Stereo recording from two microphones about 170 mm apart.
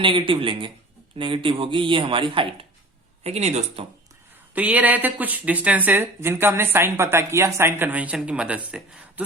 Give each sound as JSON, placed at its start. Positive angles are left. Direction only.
{"t": 0.0, "sound": "speech", "side_deg": -30}
{"t": 4.5, "sound": "a woman's voice", "side_deg": -10}